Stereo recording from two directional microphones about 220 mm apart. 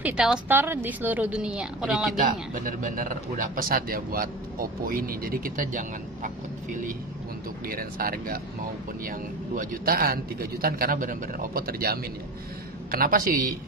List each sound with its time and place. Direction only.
0.0 s a woman's voice: 5° right (ahead or behind)
2.5 s a man's voice: 40° right (ahead or behind)